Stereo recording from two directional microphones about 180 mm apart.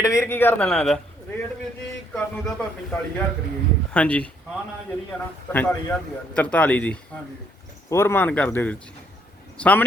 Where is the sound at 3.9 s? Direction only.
5° left (ahead or behind).